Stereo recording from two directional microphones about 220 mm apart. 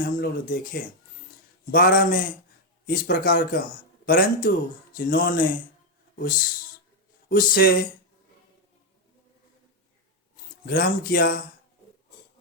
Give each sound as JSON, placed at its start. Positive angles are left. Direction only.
{"t": 0.0, "sound": "speech", "side_deg": 40}
{"t": 7.3, "sound": "speech", "side_deg": 40}
{"t": 10.7, "sound": "speech", "side_deg": 40}